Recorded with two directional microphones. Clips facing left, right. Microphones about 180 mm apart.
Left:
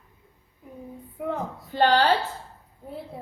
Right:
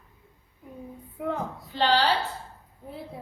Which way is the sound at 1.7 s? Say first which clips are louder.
Left 3 dB; 50° left (ahead or behind).